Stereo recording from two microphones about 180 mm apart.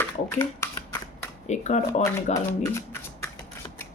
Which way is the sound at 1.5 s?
40° left (ahead or behind).